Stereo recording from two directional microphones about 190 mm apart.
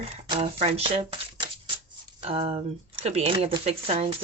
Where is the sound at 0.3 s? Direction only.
30° right (ahead or behind).